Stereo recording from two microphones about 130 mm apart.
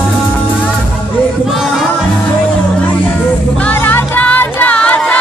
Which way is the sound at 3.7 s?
10° left (ahead or behind).